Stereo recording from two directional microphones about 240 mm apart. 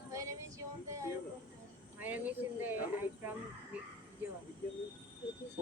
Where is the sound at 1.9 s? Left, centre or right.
Centre.